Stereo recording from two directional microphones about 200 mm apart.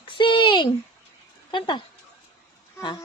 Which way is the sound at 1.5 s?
20° left (ahead or behind).